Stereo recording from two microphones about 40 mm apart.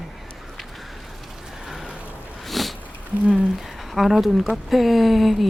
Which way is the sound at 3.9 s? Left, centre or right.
Centre.